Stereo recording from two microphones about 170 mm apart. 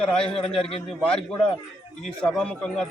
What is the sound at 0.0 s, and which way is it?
Speech, 5° left (ahead or behind).